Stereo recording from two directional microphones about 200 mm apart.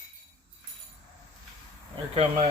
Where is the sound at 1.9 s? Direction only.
30° right (ahead or behind).